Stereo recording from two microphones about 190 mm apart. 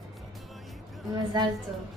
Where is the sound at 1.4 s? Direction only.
25° right (ahead or behind).